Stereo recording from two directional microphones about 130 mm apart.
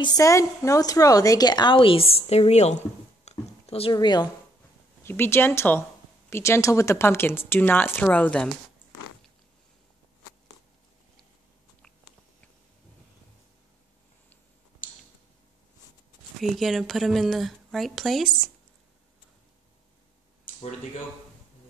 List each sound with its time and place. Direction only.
0.0 s a woman's voice: 30° left (ahead or behind); by 2.8 s 55° left (ahead or behind)
3.3 s a sound: 50° left (ahead or behind)
3.9 s a woman's voice: 35° left (ahead or behind)
5.0 s speech: 15° left (ahead or behind)
16.3 s speech: centre (ahead or behind)